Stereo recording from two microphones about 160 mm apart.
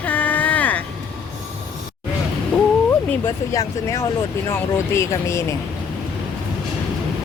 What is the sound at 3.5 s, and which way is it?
Speech, 20° left (ahead or behind).